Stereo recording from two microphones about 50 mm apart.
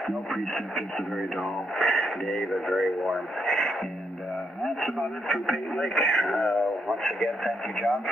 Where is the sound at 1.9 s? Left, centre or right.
Centre.